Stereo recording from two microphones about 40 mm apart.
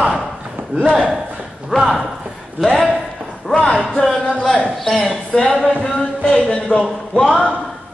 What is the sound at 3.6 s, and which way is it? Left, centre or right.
Speech, centre.